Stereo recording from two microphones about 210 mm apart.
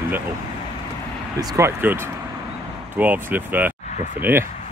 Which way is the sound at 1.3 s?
15° right (ahead or behind).